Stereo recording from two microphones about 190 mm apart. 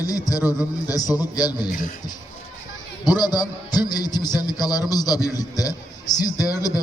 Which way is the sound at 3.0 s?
20° left (ahead or behind).